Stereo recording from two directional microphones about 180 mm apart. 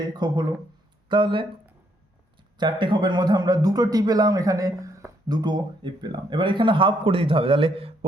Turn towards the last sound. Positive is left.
turn(degrees=-30)  # may be behind; listen again after turning